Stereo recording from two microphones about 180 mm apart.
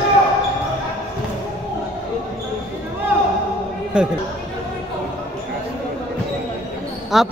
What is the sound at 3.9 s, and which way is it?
Speech, 5° right (ahead or behind).